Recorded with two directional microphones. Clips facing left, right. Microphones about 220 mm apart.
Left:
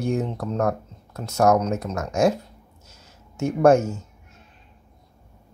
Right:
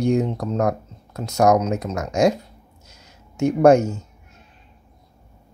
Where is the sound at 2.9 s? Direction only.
15° right (ahead or behind).